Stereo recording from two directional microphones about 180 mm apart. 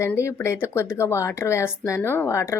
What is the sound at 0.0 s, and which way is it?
Speech, 15° left (ahead or behind).